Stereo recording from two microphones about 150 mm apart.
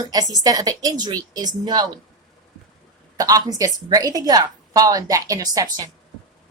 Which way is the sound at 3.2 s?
25° right (ahead or behind).